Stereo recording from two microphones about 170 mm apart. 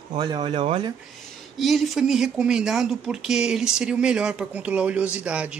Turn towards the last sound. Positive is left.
turn(degrees=-5)  # may be behind; listen again after turning